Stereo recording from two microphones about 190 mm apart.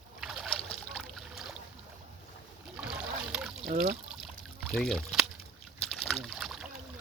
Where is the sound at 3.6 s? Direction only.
45° right (ahead or behind).